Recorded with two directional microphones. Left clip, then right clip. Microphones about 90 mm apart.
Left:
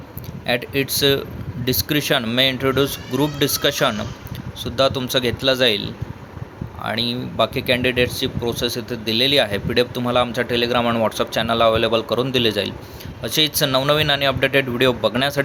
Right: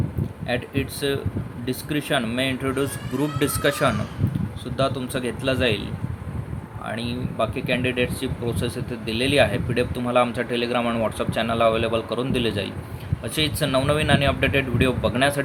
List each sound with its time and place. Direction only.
0.4 s speech: 50° left (ahead or behind); by 15.4 s 25° left (ahead or behind)